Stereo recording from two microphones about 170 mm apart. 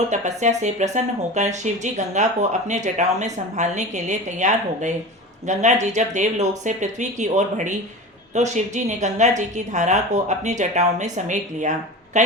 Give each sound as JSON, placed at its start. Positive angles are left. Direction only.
{"t": 0.1, "sound": "speech", "side_deg": -45}